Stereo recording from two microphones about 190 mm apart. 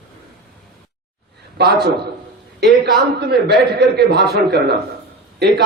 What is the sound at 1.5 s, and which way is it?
A man's voice, 60° right (ahead or behind).